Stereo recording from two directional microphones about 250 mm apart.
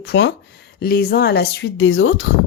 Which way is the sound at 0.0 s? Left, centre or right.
Left.